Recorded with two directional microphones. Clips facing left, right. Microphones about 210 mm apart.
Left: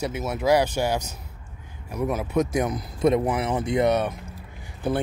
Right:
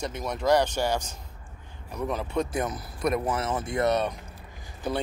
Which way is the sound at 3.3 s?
15° left (ahead or behind).